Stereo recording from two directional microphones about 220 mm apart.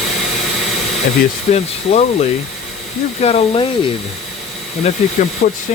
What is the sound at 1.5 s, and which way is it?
Speech, 30° left (ahead or behind).